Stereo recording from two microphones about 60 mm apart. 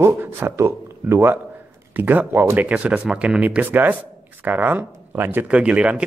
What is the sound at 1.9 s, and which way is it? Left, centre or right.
Speech, right.